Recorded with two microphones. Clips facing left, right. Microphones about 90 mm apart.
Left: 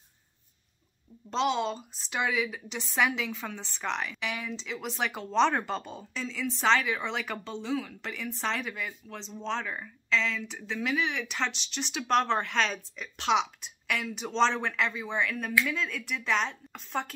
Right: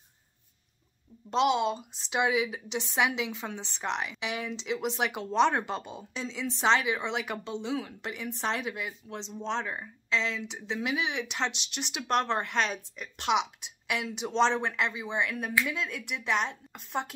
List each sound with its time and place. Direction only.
1.3 s a woman's voice: 15° right (ahead or behind)
6.2 s speech: 20° right (ahead or behind)